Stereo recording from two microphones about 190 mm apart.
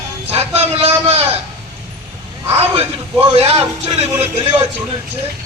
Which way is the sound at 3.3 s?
30° right (ahead or behind).